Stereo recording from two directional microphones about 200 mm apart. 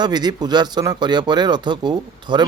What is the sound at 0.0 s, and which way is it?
Speech, 20° right (ahead or behind).